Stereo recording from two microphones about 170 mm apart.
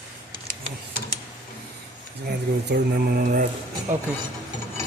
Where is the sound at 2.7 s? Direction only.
55° right (ahead or behind).